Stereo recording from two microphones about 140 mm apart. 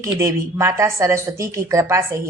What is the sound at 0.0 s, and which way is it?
A woman's voice, 20° right (ahead or behind).